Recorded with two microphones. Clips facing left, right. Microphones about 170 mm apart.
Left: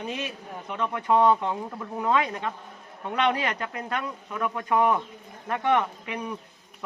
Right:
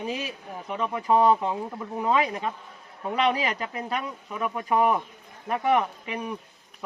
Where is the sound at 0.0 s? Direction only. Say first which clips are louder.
Right 1 dB; 5° right (ahead or behind).